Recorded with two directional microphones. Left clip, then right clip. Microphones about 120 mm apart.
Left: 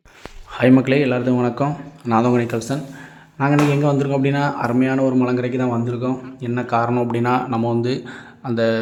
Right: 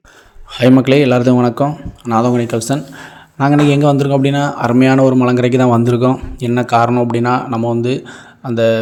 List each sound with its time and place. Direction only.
0.8 s speech: 40° right (ahead or behind)
2.0 s speech: 25° right (ahead or behind)
4.8 s speech: 60° right (ahead or behind)
6.5 s speech: 50° right (ahead or behind)
7.0 s speech: 40° right (ahead or behind)